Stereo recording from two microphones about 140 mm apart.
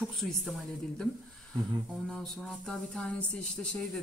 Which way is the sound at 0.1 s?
Centre (ahead or behind).